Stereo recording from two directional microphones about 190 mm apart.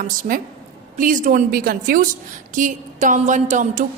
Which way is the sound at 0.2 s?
50° right (ahead or behind).